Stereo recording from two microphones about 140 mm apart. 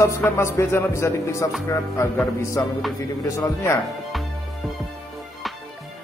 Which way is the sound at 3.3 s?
25° left (ahead or behind).